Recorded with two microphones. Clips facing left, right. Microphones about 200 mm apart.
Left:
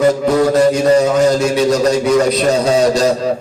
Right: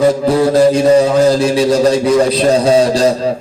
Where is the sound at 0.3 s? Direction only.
30° right (ahead or behind).